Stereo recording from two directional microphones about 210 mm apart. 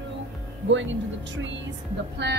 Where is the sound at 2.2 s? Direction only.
55° right (ahead or behind).